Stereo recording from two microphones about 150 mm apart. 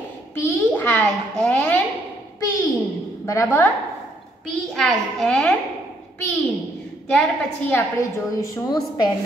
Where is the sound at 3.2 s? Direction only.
20° left (ahead or behind).